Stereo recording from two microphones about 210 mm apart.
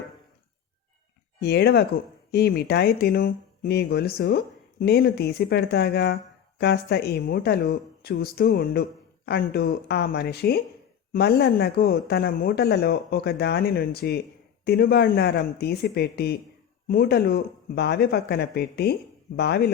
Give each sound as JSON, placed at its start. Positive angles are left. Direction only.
{"t": 1.4, "sound": "speech", "side_deg": 50}